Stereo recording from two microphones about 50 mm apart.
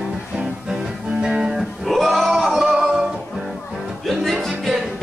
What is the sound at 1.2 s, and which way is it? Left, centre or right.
Music, centre.